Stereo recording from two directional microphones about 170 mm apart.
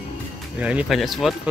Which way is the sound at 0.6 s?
5° right (ahead or behind).